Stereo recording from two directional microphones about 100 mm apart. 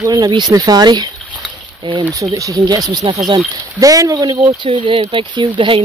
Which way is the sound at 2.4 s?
35° right (ahead or behind).